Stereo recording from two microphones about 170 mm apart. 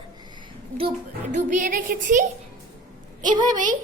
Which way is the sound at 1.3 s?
50° right (ahead or behind).